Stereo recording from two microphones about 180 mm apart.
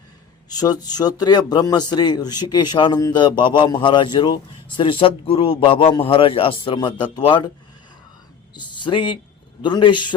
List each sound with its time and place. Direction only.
0.4 s a man's voice: 20° left (ahead or behind)
8.5 s a man's voice: 25° left (ahead or behind)